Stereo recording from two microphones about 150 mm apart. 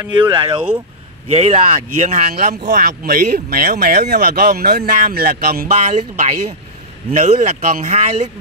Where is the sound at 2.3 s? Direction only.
80° right.